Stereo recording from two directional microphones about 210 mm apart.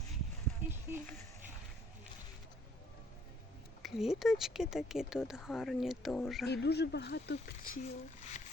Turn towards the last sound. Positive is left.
turn(degrees=40)  # may be behind; listen again after turning